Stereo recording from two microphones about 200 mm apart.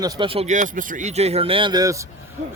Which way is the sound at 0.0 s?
20° right (ahead or behind).